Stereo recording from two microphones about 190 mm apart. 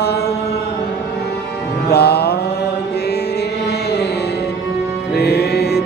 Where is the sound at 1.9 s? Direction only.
60° left (ahead or behind).